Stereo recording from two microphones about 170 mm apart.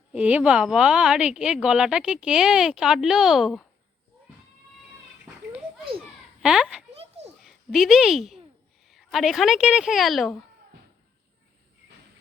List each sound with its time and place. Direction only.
0.1 s a woman's voice: 10° right (ahead or behind)
5.2 s children playing: 5° right (ahead or behind)
6.4 s a child's voice: 5° right (ahead or behind)
6.9 s a sound: 35° right (ahead or behind)
7.4 s a woman's voice: centre (ahead or behind)